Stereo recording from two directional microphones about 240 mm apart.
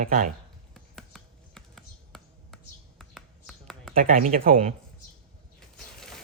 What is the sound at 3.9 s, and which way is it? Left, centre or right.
Speech, right.